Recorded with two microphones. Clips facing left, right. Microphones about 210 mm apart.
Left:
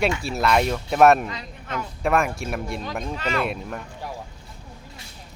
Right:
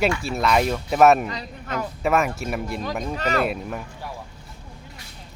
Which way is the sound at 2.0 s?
Centre (ahead or behind).